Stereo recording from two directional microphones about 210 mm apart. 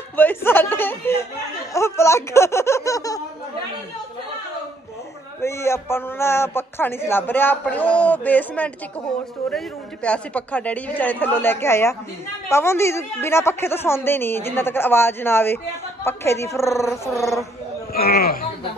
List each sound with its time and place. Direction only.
0.1 s a man's voice: 10° left (ahead or behind)
5.4 s a man's voice: 10° left (ahead or behind)
10.0 s a man's voice: 5° left (ahead or behind)
17.9 s speech: 45° left (ahead or behind)